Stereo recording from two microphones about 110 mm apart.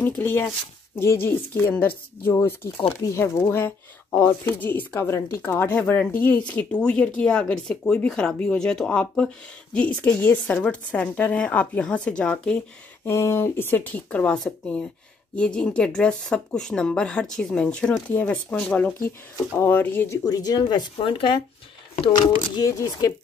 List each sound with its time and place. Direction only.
0.2 s speech: 20° left (ahead or behind)
13.0 s speech: 25° left (ahead or behind)
20.2 s speech: 35° left (ahead or behind); by 21.4 s 50° left (ahead or behind)
22.1 s speech: 35° left (ahead or behind)